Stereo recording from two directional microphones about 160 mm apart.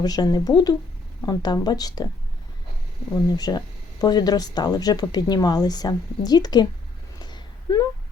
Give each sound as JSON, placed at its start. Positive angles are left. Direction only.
{"t": 0.0, "sound": "speech", "side_deg": 25}
{"t": 3.3, "sound": "speech", "side_deg": 25}
{"t": 7.2, "sound": "a sound", "side_deg": 25}